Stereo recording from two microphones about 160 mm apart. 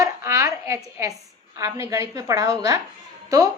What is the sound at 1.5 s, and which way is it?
A woman's voice, 20° right (ahead or behind).